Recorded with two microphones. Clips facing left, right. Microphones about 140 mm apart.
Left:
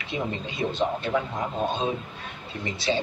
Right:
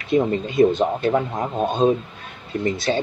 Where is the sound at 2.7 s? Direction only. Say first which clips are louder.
Even; 45° right (ahead or behind).